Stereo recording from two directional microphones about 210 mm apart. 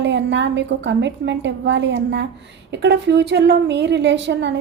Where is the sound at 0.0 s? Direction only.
55° right (ahead or behind).